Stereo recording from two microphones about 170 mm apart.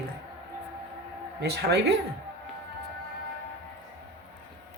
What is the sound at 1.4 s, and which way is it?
Speech, 75° right (ahead or behind).